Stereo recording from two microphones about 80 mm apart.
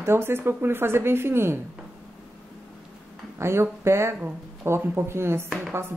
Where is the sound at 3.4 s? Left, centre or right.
Right.